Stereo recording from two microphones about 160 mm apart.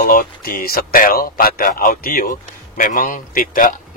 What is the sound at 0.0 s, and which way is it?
A man's voice, 65° left (ahead or behind).